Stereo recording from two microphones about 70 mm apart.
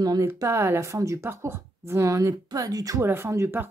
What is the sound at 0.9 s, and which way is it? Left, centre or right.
Speech, right.